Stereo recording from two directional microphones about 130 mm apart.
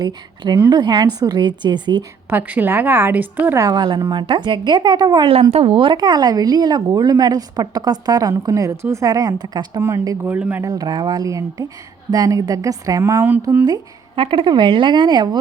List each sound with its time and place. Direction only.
0.0 s speech: 35° right (ahead or behind)
2.3 s a woman's voice: 15° right (ahead or behind)
3.6 s speech: 30° right (ahead or behind)
5.3 s speech: 50° right (ahead or behind); by 10.2 s 25° right (ahead or behind)
10.2 s a woman's voice: 10° right (ahead or behind)
10.6 s a woman's voice: 30° right (ahead or behind)
14.2 s speech: 40° right (ahead or behind)